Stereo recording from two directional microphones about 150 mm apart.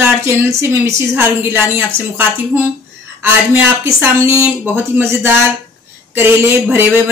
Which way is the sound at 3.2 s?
15° right (ahead or behind).